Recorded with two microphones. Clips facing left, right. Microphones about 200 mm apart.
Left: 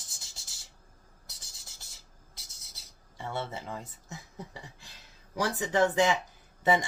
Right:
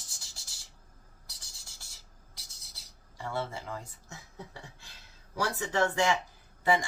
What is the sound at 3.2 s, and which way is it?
Speech, 20° left (ahead or behind).